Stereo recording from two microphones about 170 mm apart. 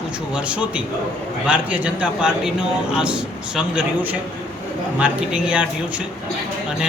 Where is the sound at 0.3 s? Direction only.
5° right (ahead or behind).